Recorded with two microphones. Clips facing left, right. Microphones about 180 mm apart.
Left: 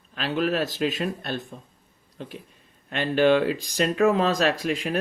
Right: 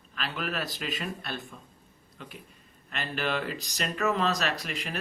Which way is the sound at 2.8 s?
35° left (ahead or behind).